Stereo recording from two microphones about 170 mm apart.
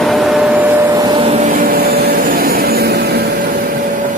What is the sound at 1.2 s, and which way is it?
Vehicle, 40° right (ahead or behind).